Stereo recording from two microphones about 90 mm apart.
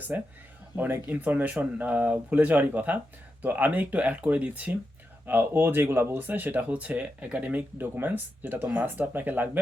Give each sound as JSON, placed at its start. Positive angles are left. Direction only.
{"t": 0.1, "sound": "speech", "side_deg": -20}